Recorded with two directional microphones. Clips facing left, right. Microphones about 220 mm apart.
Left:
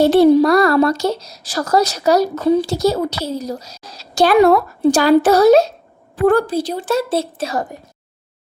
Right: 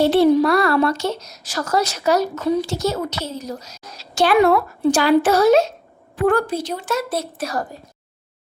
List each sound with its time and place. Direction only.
0.0 s speech: 40° left (ahead or behind); by 7.8 s 20° left (ahead or behind)